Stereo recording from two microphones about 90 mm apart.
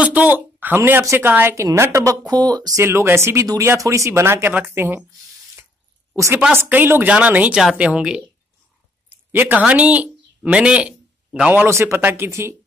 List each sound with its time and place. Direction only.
0.0 s a sound: 15° right (ahead or behind)
0.6 s speech: 20° right (ahead or behind)
1.6 s a woman's voice: 35° right (ahead or behind)
2.2 s speech: 45° right (ahead or behind)
2.8 s speech: 30° right (ahead or behind)
6.1 s a woman's voice: 35° right (ahead or behind)
6.5 s speech: 25° right (ahead or behind)
11.6 s speech: 30° right (ahead or behind)